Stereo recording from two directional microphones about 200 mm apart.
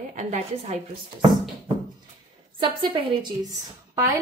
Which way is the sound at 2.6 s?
20° right (ahead or behind).